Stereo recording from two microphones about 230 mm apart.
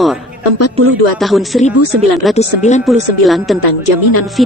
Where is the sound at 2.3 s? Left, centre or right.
Left.